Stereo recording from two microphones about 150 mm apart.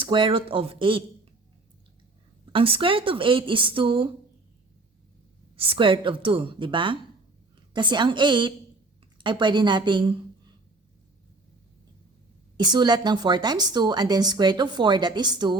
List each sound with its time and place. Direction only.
0.0 s a woman's voice: 35° right (ahead or behind)
2.5 s a woman's voice: 35° right (ahead or behind)
5.5 s a woman's voice: 40° right (ahead or behind)
12.5 s a woman's voice: 30° right (ahead or behind)